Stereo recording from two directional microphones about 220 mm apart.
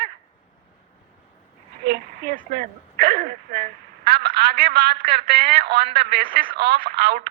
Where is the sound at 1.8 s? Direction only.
45° right (ahead or behind).